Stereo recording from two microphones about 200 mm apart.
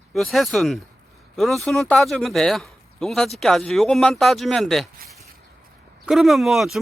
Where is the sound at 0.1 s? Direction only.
Centre (ahead or behind).